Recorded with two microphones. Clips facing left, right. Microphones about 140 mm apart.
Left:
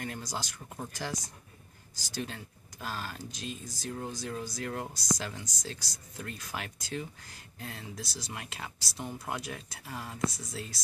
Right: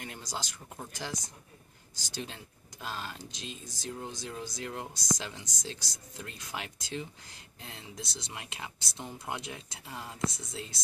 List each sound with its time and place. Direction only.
0.0 s speech: 20° right (ahead or behind)
8.9 s speech: centre (ahead or behind)
9.4 s speech: 20° right (ahead or behind)